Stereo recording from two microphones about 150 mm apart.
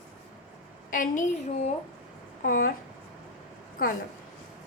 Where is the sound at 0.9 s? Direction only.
65° left (ahead or behind).